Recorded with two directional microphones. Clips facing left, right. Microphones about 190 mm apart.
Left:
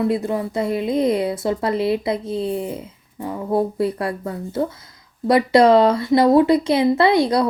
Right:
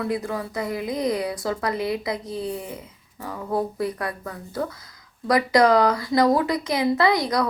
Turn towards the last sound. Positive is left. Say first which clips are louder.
# left 5 dB
turn(degrees=30)  # may be behind; listen again after turning